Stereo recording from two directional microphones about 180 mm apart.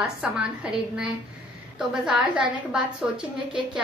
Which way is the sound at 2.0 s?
5° right (ahead or behind).